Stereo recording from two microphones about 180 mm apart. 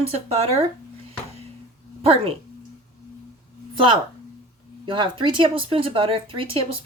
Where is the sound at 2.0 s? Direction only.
35° right (ahead or behind).